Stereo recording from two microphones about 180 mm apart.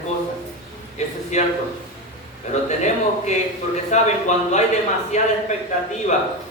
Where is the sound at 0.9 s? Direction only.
40° left (ahead or behind).